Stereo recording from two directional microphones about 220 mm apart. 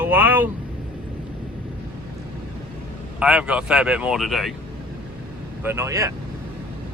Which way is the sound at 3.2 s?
5° right (ahead or behind).